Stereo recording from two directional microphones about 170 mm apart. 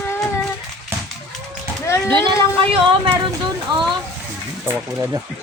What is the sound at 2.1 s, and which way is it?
Speech, 30° right (ahead or behind).